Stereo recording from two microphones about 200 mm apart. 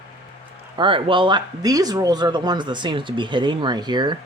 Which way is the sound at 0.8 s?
25° right (ahead or behind).